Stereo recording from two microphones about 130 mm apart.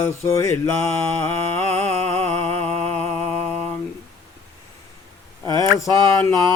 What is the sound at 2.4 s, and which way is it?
Music, 10° left (ahead or behind).